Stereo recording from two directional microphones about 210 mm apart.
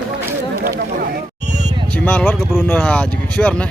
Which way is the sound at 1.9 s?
5° left (ahead or behind).